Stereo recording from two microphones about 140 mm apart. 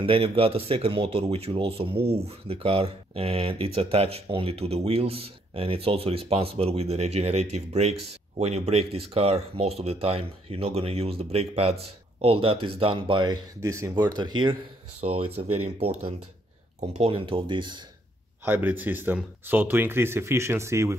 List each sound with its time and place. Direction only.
0.0 s speech: 40° right (ahead or behind)
15.0 s speech: 45° right (ahead or behind)
18.4 s speech: 15° right (ahead or behind)